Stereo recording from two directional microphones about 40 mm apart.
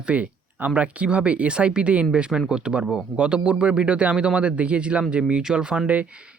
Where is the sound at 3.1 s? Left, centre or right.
Right.